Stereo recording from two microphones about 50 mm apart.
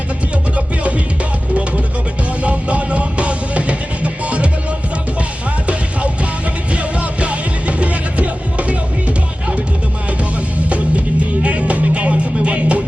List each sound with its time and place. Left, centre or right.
2.4 s music: right
6.7 s music: right
10.7 s music: right